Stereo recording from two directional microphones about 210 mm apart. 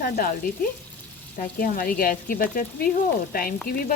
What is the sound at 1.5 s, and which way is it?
Speech, 45° left (ahead or behind).